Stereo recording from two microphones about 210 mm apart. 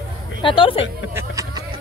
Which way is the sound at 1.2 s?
15° right (ahead or behind).